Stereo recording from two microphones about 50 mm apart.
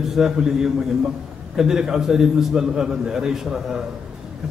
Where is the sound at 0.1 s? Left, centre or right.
Centre.